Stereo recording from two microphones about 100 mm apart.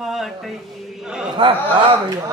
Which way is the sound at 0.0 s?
Centre (ahead or behind).